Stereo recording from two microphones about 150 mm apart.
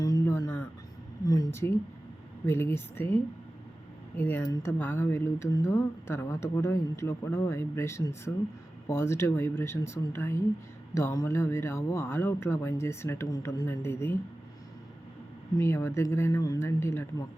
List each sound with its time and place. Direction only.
0.0 s a sound: 20° left (ahead or behind)
2.5 s speech: 15° left (ahead or behind)
15.5 s speech: 15° left (ahead or behind)